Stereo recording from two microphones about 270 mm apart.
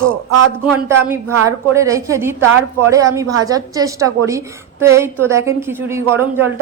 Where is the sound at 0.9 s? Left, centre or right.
Centre.